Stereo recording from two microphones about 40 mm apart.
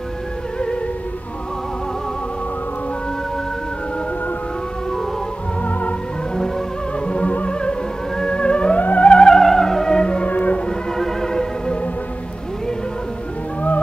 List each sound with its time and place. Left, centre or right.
5.6 s music: left
7.1 s music: left
8.2 s theremin: left
8.7 s theremin: left
9.1 s music: centre
10.2 s music: left
10.7 s music: centre